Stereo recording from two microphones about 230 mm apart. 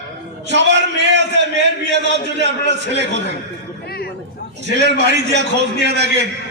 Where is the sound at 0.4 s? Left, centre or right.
Right.